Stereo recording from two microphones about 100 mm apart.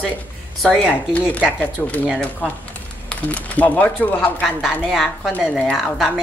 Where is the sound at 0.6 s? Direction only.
10° left (ahead or behind).